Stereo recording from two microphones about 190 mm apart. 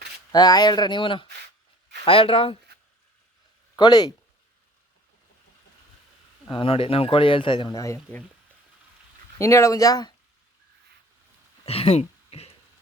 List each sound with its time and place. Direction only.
0.3 s speech: 20° left (ahead or behind)
3.8 s speech: 20° left (ahead or behind)
6.5 s speech: 25° left (ahead or behind)
9.4 s speech: 15° left (ahead or behind)
11.6 s speech: 30° left (ahead or behind)